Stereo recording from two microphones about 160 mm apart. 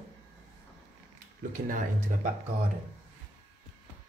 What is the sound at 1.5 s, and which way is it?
Speech, 55° right (ahead or behind).